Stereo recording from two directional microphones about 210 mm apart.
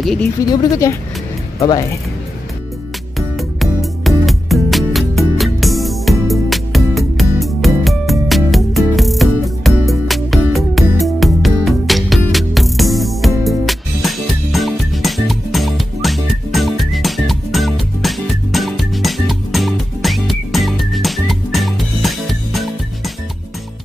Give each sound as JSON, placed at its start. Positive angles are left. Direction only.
{"t": 0.0, "sound": "speech", "side_deg": 0}
{"t": 0.5, "sound": "speech", "side_deg": 15}
{"t": 3.2, "sound": "music", "side_deg": 0}